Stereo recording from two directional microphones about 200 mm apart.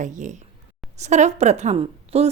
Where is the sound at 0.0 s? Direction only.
40° right (ahead or behind).